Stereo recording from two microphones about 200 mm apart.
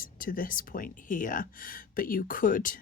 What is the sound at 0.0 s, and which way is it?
Speech, 45° left (ahead or behind).